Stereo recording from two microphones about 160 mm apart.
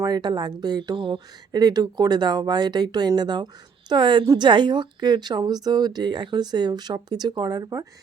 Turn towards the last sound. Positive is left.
turn(degrees=-25)  # may be behind; listen again after turning